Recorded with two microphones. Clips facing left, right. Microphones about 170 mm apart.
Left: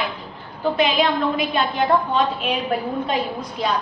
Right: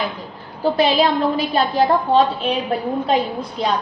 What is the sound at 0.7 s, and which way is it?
A woman's voice, 35° right (ahead or behind).